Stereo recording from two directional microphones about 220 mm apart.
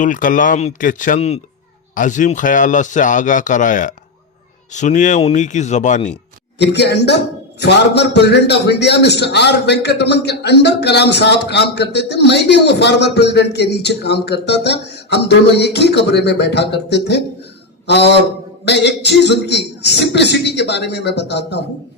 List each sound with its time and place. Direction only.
0.0 s a man's voice: 35° left (ahead or behind)
6.6 s a man's voice: 50° left (ahead or behind)